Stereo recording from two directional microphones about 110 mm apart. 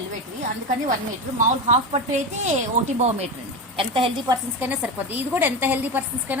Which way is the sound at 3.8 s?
55° right (ahead or behind).